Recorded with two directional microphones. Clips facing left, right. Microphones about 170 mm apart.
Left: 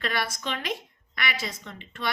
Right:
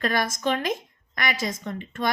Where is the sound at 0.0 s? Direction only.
45° right (ahead or behind).